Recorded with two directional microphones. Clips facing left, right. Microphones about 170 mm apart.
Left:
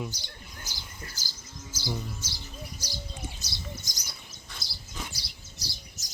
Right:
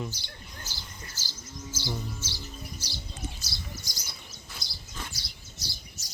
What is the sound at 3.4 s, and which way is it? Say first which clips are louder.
Bird: left 1 dB; 20° left (ahead or behind).